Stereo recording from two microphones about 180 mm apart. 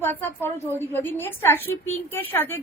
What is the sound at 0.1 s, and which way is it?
A woman's voice, 10° left (ahead or behind).